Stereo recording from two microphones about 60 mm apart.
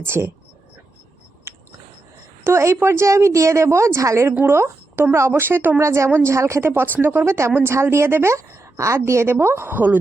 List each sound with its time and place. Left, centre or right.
0.0 s speech: right
2.4 s a woman's voice: right
4.4 s speech: right
5.1 s a woman's voice: right
5.4 s speech: right
5.8 s a woman's voice: right
7.3 s a woman's voice: right
8.8 s a woman's voice: right
9.7 s speech: right